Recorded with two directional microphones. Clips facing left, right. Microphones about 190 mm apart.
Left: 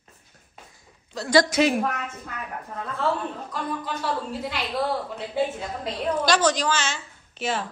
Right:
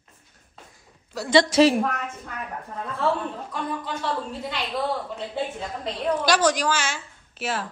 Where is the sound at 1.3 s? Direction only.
30° right (ahead or behind).